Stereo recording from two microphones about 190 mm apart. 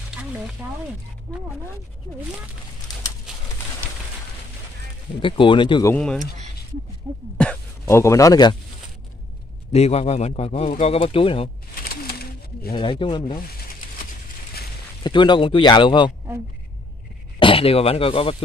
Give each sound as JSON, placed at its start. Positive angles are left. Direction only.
{"t": 5.2, "sound": "speech", "side_deg": 25}
{"t": 5.9, "sound": "speech", "side_deg": 5}
{"t": 7.8, "sound": "speech", "side_deg": 15}
{"t": 9.7, "sound": "speech", "side_deg": 35}
{"t": 11.9, "sound": "a sound", "side_deg": 55}
{"t": 13.0, "sound": "speech", "side_deg": 25}
{"t": 15.0, "sound": "speech", "side_deg": 25}
{"t": 17.4, "sound": "speech", "side_deg": 30}